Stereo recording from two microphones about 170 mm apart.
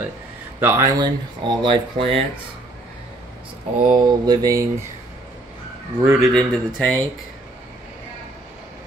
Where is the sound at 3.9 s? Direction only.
25° right (ahead or behind).